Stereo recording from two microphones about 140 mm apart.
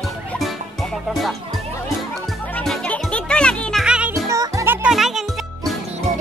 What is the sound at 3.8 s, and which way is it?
Music, 5° right (ahead or behind).